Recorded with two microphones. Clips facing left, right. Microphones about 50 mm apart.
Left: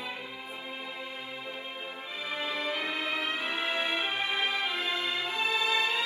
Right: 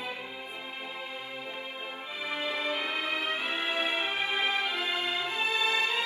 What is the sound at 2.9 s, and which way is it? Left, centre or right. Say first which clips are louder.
Music: right 1 dB; right.